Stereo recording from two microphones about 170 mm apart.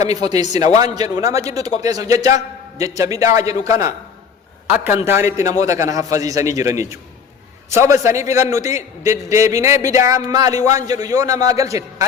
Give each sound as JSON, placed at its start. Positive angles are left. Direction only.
{"t": 0.0, "sound": "a man's voice", "side_deg": -20}